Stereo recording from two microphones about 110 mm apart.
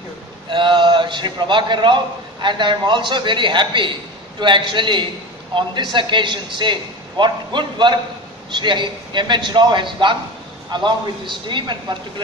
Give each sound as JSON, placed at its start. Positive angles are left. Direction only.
{"t": 0.5, "sound": "a man's voice", "side_deg": -45}